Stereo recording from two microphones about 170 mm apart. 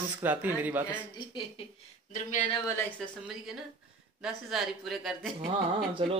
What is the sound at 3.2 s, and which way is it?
Speech, 5° right (ahead or behind).